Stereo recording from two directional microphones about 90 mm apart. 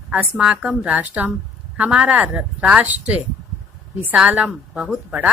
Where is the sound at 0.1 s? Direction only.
15° right (ahead or behind).